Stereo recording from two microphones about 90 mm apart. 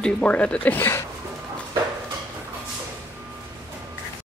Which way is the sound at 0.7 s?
25° left (ahead or behind).